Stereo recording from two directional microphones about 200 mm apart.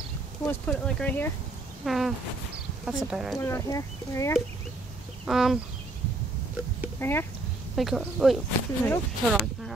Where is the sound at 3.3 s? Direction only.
15° left (ahead or behind).